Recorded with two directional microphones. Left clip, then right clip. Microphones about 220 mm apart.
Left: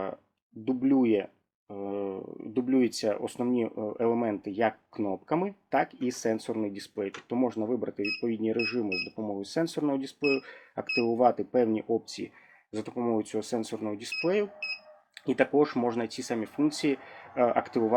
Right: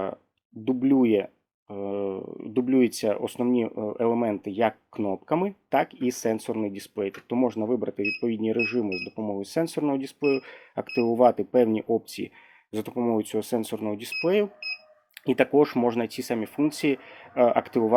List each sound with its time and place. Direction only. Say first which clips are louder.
0.6 s speech: right 4 dB; 40° right (ahead or behind)